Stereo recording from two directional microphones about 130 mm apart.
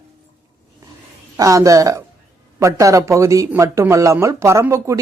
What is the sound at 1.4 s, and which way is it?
Speech, 25° right (ahead or behind).